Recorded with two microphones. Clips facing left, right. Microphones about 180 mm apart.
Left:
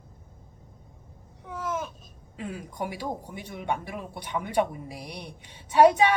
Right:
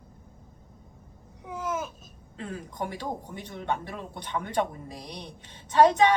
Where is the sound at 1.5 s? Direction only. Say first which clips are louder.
Even; 10° right (ahead or behind).